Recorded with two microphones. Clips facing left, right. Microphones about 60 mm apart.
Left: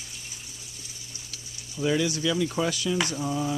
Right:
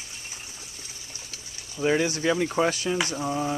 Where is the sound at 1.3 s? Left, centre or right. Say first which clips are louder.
Right 1 dB; right.